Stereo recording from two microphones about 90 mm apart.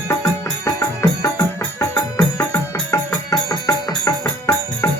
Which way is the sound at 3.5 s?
45° left (ahead or behind).